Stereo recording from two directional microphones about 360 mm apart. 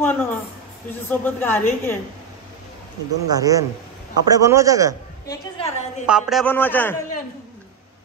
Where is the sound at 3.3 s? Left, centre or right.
Centre.